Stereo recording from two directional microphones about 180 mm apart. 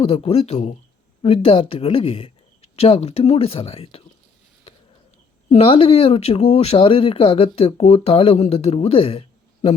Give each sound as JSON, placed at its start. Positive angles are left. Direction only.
{"t": 0.0, "sound": "speech", "side_deg": 35}
{"t": 5.5, "sound": "speech", "side_deg": 30}